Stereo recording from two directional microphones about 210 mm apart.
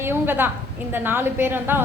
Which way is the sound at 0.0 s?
10° right (ahead or behind).